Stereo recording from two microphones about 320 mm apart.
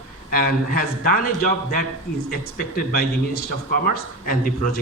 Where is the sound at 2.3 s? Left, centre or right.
Left.